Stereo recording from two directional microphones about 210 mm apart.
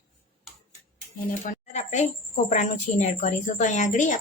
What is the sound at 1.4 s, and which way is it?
A woman's voice, 35° left (ahead or behind).